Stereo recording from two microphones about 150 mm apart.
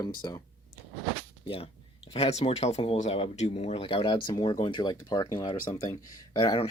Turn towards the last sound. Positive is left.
turn(degrees=30)  # may be behind; listen again after turning